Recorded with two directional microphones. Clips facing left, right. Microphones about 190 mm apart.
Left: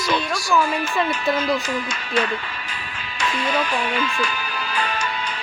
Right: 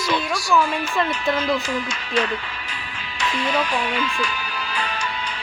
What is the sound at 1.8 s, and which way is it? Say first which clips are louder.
Speech: even; 50° left (ahead or behind).